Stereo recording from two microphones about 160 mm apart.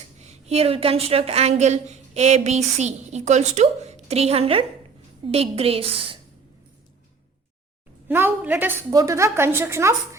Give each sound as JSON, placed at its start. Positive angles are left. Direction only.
{"t": 0.2, "sound": "a woman's voice", "side_deg": -40}
{"t": 8.0, "sound": "a woman's voice", "side_deg": -10}
{"t": 8.9, "sound": "a woman's voice", "side_deg": -20}